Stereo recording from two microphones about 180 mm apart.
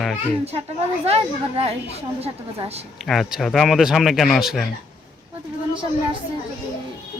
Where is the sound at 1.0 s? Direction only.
35° right (ahead or behind).